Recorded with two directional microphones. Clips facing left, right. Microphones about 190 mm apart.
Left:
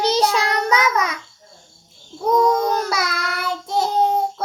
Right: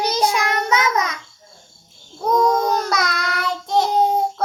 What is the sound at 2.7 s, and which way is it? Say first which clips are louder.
Child singing: right 1 dB; 5° left (ahead or behind).